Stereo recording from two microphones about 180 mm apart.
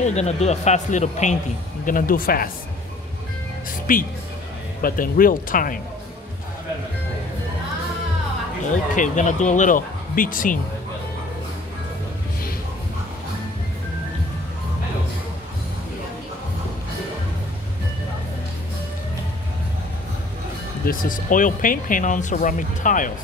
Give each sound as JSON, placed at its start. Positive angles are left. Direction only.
{"t": 0.0, "sound": "speech", "side_deg": 40}
{"t": 3.9, "sound": "speech", "side_deg": 50}
{"t": 8.9, "sound": "speech", "side_deg": 45}
{"t": 20.8, "sound": "speech", "side_deg": 50}